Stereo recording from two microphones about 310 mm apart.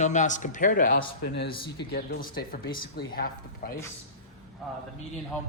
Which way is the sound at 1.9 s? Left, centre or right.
Left.